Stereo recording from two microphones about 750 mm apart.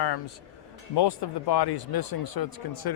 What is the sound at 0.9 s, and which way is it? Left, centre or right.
Speech, left.